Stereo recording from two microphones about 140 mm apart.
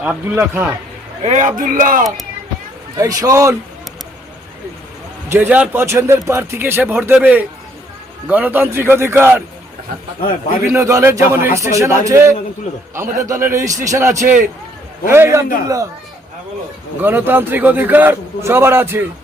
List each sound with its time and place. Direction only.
0.3 s a man's voice: 15° right (ahead or behind)
1.2 s a man's voice: 60° right (ahead or behind); by 2.0 s 85° right
3.0 s a man's voice: 25° right (ahead or behind)
5.3 s a man's voice: 15° right (ahead or behind)
10.7 s a man's voice: 20° right (ahead or behind)
17.0 s a man's voice: 15° right (ahead or behind)